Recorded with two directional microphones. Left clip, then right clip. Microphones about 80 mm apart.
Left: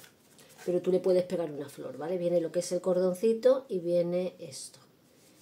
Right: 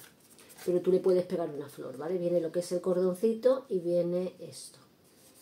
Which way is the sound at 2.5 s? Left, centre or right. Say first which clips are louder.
Left 1 dB; centre.